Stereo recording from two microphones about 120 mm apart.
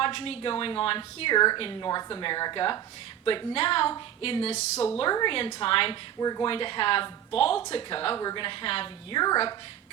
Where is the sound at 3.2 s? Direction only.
50° left (ahead or behind).